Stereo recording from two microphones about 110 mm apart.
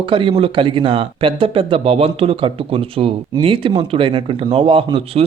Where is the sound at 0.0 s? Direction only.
50° right (ahead or behind).